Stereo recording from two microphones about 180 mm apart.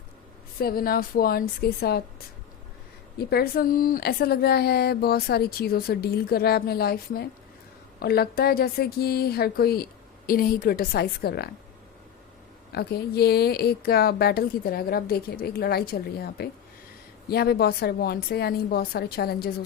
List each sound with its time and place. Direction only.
0.6 s a woman's voice: 55° left (ahead or behind)
12.7 s a woman's voice: 60° left (ahead or behind)